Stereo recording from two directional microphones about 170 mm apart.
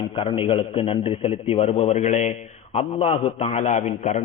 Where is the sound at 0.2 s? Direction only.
35° left (ahead or behind).